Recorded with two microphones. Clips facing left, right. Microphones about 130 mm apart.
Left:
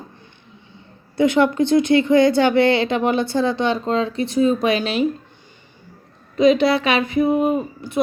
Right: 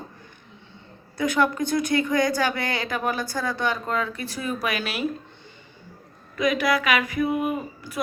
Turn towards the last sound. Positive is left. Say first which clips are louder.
# left 7 dB
turn(degrees=25)  # may be behind; listen again after turning